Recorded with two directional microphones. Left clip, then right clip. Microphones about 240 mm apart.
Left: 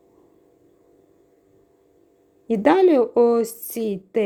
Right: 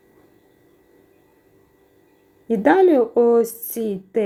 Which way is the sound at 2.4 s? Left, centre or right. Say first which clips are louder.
Right 1 dB; left.